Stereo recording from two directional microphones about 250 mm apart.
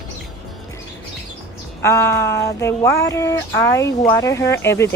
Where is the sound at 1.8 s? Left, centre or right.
Centre.